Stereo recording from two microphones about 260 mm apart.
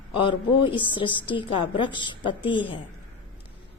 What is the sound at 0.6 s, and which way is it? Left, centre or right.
A woman's voice, centre.